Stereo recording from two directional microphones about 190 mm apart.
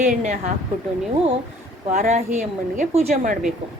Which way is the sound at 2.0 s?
35° right (ahead or behind).